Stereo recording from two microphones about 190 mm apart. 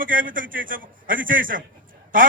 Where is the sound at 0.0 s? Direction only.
45° right (ahead or behind).